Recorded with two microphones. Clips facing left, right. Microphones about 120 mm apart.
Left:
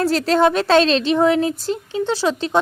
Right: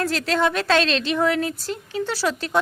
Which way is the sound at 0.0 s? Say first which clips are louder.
Left 6 dB; 35° left (ahead or behind).